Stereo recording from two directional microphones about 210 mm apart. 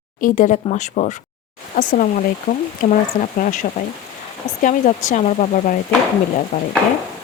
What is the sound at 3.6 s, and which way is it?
Speech, 35° left (ahead or behind).